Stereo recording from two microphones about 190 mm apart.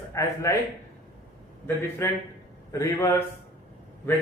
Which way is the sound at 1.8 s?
10° left (ahead or behind).